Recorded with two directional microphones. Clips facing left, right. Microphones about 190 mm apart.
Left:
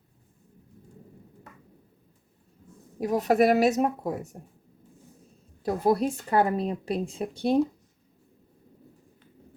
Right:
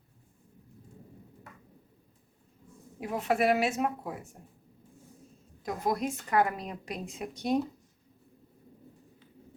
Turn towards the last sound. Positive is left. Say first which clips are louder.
# left 5 dB
turn(degrees=30)  # may be behind; listen again after turning